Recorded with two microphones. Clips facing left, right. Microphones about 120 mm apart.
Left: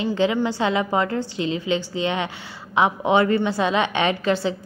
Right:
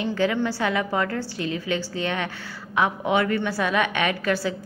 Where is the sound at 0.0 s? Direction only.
20° left (ahead or behind).